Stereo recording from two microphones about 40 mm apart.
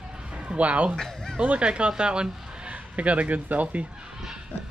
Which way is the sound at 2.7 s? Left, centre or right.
Right.